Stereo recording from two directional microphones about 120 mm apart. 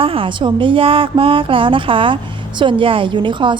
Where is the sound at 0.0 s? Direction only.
50° right (ahead or behind).